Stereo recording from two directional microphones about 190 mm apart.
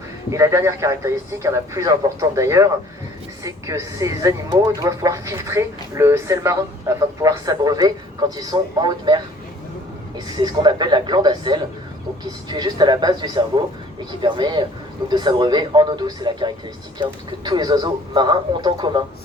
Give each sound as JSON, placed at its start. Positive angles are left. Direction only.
{"t": 0.3, "sound": "a man's voice", "side_deg": -15}
{"t": 10.3, "sound": "a man's voice", "side_deg": -20}